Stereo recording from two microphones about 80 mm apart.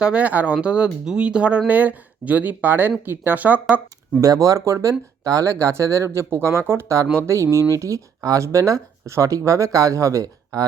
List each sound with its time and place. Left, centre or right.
0.0 s speech: centre
4.2 s speech: right